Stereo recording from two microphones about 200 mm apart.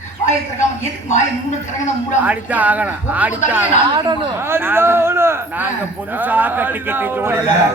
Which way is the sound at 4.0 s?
25° right (ahead or behind).